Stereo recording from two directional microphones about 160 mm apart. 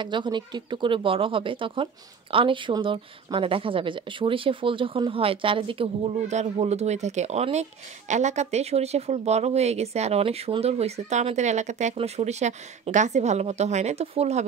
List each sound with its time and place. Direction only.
0.0 s speech: 30° right (ahead or behind)